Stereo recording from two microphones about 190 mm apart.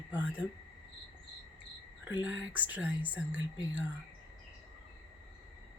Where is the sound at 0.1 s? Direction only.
10° right (ahead or behind).